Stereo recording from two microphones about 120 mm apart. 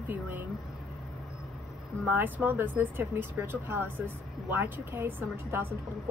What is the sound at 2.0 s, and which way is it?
Speech, 15° right (ahead or behind).